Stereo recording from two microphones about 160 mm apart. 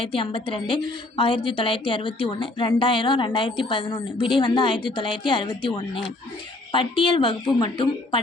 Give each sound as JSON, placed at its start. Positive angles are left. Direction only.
{"t": 0.0, "sound": "a woman's voice", "side_deg": 35}